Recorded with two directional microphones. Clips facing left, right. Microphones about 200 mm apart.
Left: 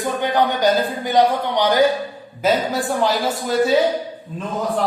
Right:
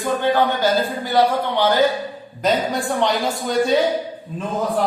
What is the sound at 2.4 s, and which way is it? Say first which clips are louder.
A woman's voice: left 1 dB; 5° left (ahead or behind).